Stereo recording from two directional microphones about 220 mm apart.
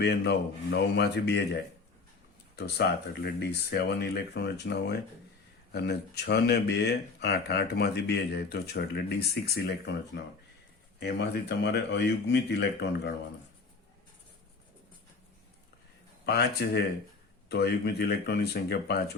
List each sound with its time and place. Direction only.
0.0 s speech: 50° left (ahead or behind)
2.6 s speech: 50° left (ahead or behind)
16.2 s speech: 45° left (ahead or behind)